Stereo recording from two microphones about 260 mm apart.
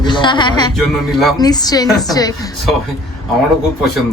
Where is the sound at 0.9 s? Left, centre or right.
Centre.